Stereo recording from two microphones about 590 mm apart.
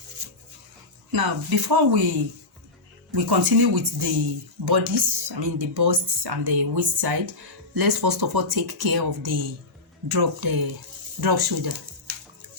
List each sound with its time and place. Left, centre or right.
1.1 s speech: right
3.1 s speech: right